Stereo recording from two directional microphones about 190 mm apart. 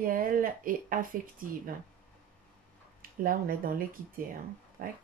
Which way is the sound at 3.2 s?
50° right (ahead or behind).